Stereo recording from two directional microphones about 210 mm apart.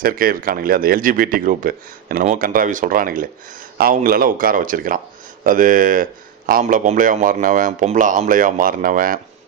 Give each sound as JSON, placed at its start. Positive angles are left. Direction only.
{"t": 0.0, "sound": "speech", "side_deg": -45}